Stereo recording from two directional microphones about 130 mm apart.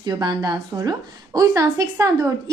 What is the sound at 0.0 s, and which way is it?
A woman's voice, 30° right (ahead or behind).